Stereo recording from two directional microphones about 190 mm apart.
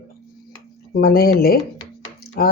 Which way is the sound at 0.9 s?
50° left (ahead or behind).